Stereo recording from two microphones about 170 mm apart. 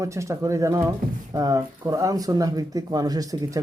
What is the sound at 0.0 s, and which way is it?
A man's voice, 15° right (ahead or behind).